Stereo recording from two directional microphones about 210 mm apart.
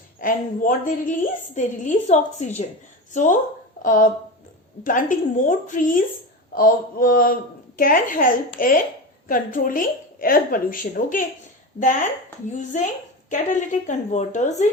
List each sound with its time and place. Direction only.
0.2 s a woman's voice: 40° left (ahead or behind)
3.8 s a woman's voice: 40° left (ahead or behind)
6.5 s a sound: 45° left (ahead or behind)
7.8 s a woman's voice: 40° left (ahead or behind)
8.5 s a sound: 40° left (ahead or behind)
9.2 s a woman's voice: 40° left (ahead or behind)
12.5 s a woman's voice: 35° left (ahead or behind)